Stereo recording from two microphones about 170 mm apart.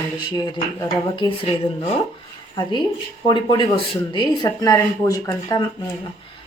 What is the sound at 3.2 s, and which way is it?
Speech, 30° left (ahead or behind).